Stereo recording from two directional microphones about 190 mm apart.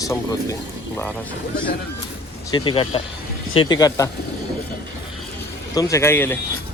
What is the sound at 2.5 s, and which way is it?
Speech, 25° left (ahead or behind).